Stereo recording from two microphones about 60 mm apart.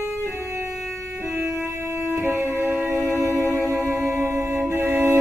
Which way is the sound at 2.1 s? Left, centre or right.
Right.